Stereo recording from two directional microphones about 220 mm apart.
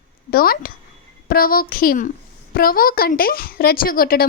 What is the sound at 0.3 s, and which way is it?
A woman's voice, 40° left (ahead or behind).